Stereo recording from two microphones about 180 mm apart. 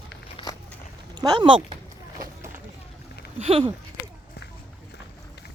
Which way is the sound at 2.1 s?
20° right (ahead or behind).